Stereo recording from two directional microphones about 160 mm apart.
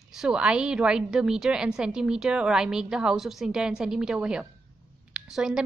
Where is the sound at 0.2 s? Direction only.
5° right (ahead or behind).